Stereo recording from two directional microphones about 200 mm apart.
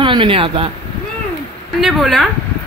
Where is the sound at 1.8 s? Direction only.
Centre (ahead or behind).